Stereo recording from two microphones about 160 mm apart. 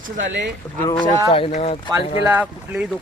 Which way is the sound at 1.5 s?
40° left (ahead or behind).